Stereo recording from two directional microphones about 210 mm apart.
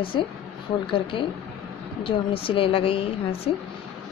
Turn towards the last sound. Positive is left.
turn(degrees=25)  # may be behind; listen again after turning